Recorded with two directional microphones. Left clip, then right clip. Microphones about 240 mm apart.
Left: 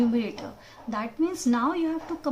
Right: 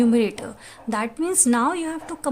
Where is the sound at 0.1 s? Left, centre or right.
Right.